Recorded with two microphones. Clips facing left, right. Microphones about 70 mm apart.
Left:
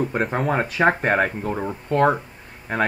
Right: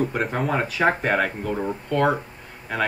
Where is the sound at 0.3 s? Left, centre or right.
Left.